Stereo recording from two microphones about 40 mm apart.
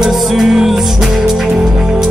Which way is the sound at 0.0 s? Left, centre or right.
Centre.